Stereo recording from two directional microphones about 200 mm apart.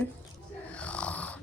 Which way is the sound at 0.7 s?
5° left (ahead or behind).